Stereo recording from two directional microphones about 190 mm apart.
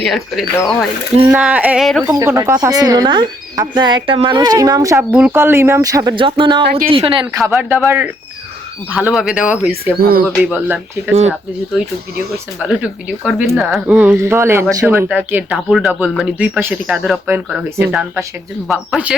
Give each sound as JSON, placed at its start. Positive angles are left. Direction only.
{"t": 0.0, "sound": "speech", "side_deg": 0}
{"t": 2.1, "sound": "speech", "side_deg": -15}
{"t": 7.9, "sound": "speech", "side_deg": -10}
{"t": 10.0, "sound": "speech", "side_deg": -50}
{"t": 10.4, "sound": "speech", "side_deg": -10}
{"t": 12.6, "sound": "speech", "side_deg": -5}